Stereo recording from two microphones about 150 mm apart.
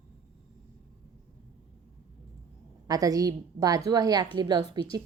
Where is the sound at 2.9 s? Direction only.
25° right (ahead or behind).